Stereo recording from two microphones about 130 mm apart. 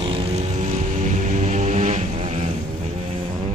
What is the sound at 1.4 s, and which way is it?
Vehicle, 65° right (ahead or behind).